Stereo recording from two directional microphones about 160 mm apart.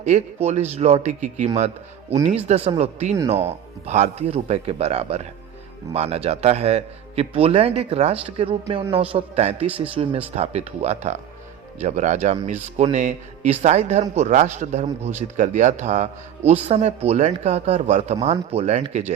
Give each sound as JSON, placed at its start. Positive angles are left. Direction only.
{"t": 0.7, "sound": "speech", "side_deg": -40}
{"t": 9.6, "sound": "speech", "side_deg": -10}
{"t": 9.9, "sound": "speech", "side_deg": -35}